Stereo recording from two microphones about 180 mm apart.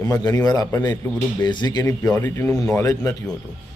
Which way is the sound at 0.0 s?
20° left (ahead or behind).